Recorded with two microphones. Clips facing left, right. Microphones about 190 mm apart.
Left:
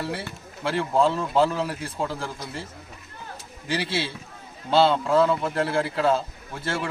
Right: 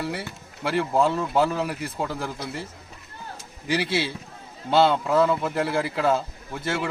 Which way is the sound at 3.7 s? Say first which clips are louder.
Right 3 dB; 15° right (ahead or behind).